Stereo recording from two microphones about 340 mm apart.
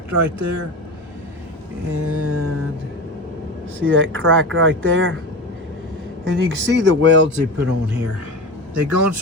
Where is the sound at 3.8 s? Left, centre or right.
Right.